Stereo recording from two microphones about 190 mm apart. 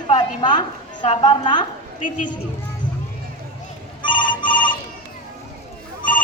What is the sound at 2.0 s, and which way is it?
Speech, 45° left (ahead or behind).